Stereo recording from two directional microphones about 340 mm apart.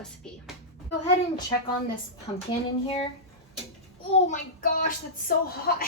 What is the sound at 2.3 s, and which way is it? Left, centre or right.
Speech, centre.